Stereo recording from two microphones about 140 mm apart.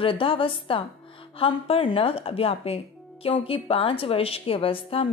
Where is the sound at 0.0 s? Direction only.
40° left (ahead or behind).